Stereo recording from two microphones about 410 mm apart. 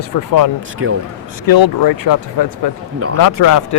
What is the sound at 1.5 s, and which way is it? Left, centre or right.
Speech, left.